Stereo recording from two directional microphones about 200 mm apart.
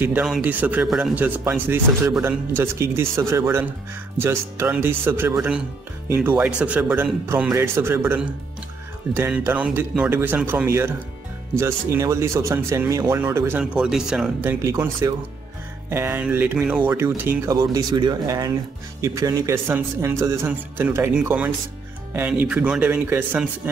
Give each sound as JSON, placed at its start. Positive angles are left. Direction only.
{"t": 0.0, "sound": "speech", "side_deg": -5}
{"t": 17.6, "sound": "speech", "side_deg": -20}